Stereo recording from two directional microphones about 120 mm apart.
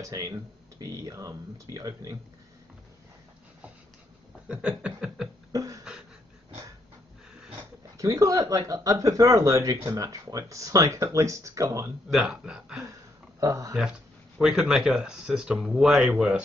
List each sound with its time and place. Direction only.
0.0 s speech: 30° right (ahead or behind)
4.5 s a sound: 10° right (ahead or behind)
5.5 s a sound: 25° right (ahead or behind)
8.0 s speech: 25° right (ahead or behind)
12.1 s speech: 5° right (ahead or behind)
13.4 s speech: 30° right (ahead or behind)
14.4 s speech: 5° right (ahead or behind)